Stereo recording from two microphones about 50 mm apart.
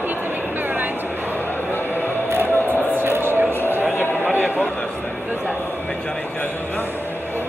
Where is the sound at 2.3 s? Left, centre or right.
Right.